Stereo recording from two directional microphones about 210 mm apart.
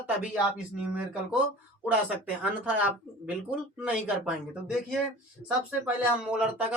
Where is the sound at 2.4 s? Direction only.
5° right (ahead or behind).